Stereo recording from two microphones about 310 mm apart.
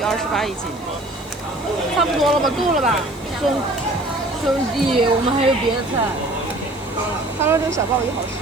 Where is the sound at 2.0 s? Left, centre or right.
Centre.